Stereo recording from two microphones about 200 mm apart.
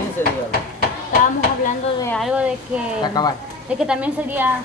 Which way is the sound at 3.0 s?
20° left (ahead or behind).